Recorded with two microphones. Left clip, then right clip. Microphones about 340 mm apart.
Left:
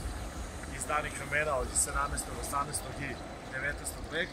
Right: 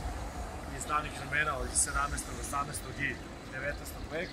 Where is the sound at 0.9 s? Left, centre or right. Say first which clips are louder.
Even; centre.